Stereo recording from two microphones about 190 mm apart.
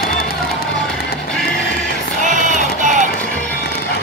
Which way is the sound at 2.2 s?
40° right (ahead or behind).